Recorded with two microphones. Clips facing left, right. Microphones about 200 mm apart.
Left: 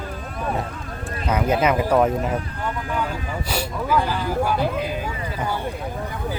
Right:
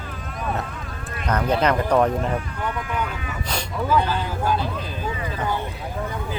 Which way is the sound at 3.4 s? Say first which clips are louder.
Right 1 dB; 10° left (ahead or behind).